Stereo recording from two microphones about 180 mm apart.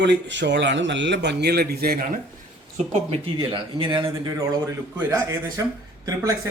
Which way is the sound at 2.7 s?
35° right (ahead or behind).